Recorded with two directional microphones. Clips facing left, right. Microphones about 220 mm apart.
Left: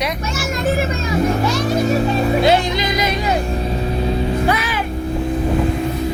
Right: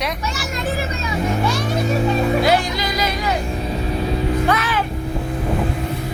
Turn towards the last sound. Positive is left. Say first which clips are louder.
# even
turn(degrees=10)  # may be behind; listen again after turning